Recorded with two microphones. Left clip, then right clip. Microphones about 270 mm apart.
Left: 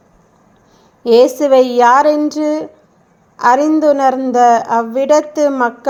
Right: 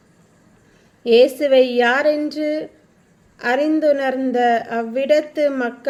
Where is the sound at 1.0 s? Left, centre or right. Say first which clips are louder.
Left 4 dB; centre.